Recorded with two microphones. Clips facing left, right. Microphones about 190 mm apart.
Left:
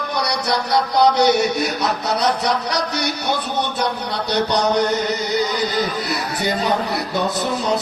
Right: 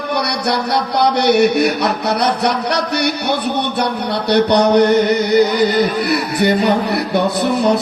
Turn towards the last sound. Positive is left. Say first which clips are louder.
# right 5 dB
turn(degrees=-65)  # may be behind; listen again after turning